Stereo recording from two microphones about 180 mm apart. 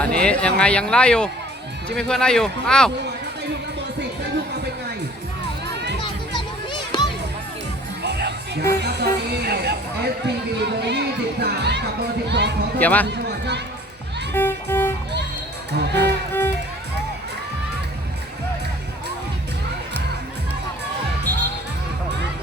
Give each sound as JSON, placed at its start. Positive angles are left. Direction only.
{"t": 0.0, "sound": "speech", "side_deg": 5}
{"t": 5.6, "sound": "crowd", "side_deg": -70}
{"t": 6.0, "sound": "music", "side_deg": 25}
{"t": 8.0, "sound": "music", "side_deg": -70}
{"t": 12.8, "sound": "speech", "side_deg": 10}
{"t": 13.1, "sound": "run", "side_deg": -70}
{"t": 14.3, "sound": "music", "side_deg": 10}
{"t": 15.8, "sound": "music", "side_deg": -70}